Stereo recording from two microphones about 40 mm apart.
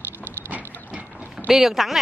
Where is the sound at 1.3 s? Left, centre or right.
Centre.